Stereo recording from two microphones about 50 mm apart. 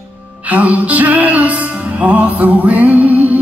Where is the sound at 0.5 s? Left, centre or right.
Right.